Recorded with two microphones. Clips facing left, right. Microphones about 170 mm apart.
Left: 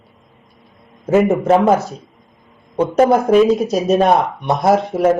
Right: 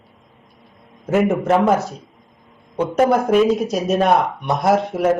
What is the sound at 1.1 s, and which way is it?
Speech, 5° left (ahead or behind).